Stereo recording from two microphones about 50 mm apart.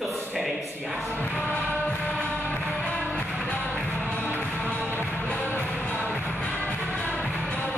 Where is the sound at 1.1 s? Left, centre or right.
Left.